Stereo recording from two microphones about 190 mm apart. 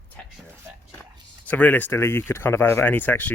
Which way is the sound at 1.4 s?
10° left (ahead or behind).